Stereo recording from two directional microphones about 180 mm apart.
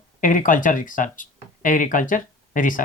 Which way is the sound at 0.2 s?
50° left (ahead or behind).